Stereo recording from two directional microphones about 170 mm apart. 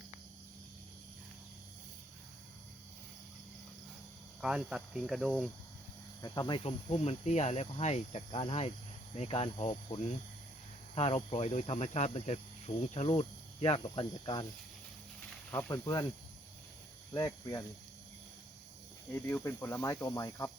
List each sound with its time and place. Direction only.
4.4 s speech: 5° right (ahead or behind)
6.2 s speech: 25° left (ahead or behind)
15.5 s speech: 20° left (ahead or behind)
17.2 s speech: 20° left (ahead or behind)
19.1 s speech: 15° left (ahead or behind)